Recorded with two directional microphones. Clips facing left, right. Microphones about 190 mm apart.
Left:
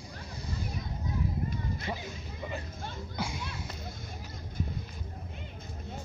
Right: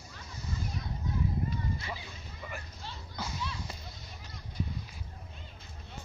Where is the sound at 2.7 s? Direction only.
50° left (ahead or behind).